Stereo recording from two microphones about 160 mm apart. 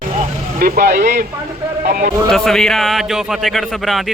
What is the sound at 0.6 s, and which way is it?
Speech, 75° right (ahead or behind).